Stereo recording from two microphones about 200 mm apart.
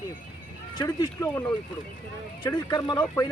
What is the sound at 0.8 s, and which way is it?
Speech, 20° left (ahead or behind).